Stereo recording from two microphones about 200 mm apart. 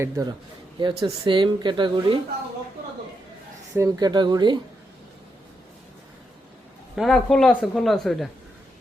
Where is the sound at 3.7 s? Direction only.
15° right (ahead or behind).